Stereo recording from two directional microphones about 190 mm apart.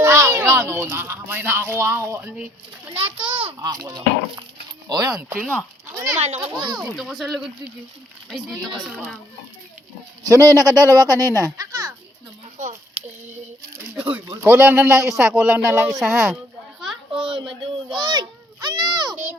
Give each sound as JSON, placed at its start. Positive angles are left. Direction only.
{"t": 0.0, "sound": "speech", "side_deg": -15}
{"t": 3.0, "sound": "a child's voice", "side_deg": -25}
{"t": 5.4, "sound": "speech", "side_deg": 5}
{"t": 6.1, "sound": "a child's voice", "side_deg": -35}
{"t": 6.7, "sound": "speech", "side_deg": 0}
{"t": 10.2, "sound": "a child's voice", "side_deg": -20}
{"t": 13.8, "sound": "speech", "side_deg": -5}
{"t": 15.1, "sound": "speech", "side_deg": 0}
{"t": 17.2, "sound": "a sound", "side_deg": -25}
{"t": 17.6, "sound": "children playing", "side_deg": -25}